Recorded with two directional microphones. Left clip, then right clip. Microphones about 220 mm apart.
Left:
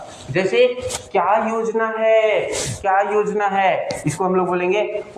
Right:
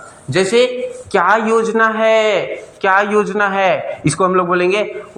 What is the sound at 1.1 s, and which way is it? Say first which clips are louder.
A man's voice: right 5 dB; 55° right (ahead or behind).